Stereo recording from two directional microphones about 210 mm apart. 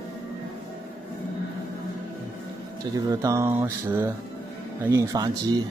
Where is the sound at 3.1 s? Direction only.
15° right (ahead or behind).